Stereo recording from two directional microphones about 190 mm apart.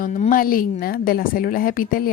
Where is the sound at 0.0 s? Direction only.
45° left (ahead or behind).